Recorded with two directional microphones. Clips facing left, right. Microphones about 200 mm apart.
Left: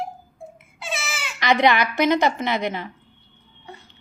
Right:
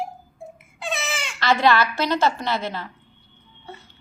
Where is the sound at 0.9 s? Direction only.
5° left (ahead or behind).